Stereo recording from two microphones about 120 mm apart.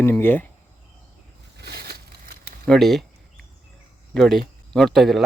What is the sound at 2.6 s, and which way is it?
Speech, centre (ahead or behind).